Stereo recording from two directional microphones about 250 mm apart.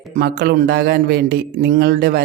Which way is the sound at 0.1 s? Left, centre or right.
Right.